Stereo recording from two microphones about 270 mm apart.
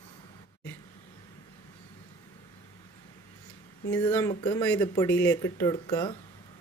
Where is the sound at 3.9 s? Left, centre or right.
Centre.